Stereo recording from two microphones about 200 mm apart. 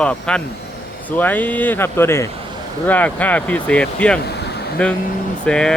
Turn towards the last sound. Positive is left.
turn(degrees=5)  # may be behind; listen again after turning